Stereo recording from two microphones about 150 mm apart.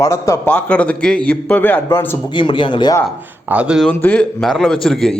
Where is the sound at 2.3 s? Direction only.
30° left (ahead or behind).